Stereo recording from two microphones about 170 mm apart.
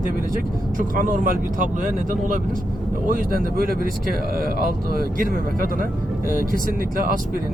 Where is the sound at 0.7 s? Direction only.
55° right (ahead or behind).